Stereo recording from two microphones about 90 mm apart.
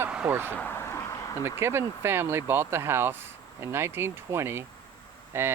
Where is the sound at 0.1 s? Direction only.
10° right (ahead or behind).